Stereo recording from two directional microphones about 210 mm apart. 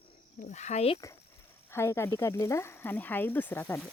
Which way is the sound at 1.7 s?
10° left (ahead or behind).